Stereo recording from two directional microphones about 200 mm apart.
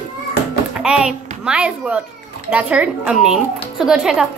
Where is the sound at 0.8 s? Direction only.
5° right (ahead or behind).